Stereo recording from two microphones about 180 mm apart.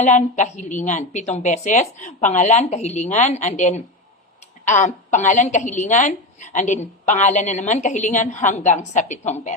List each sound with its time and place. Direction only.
0.0 s a woman's voice: 40° left (ahead or behind)